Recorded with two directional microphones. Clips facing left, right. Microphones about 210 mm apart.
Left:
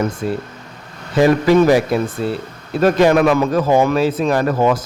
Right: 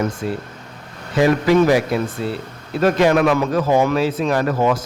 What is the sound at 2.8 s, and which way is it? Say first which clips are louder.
A man's voice: left 2 dB; 40° left (ahead or behind).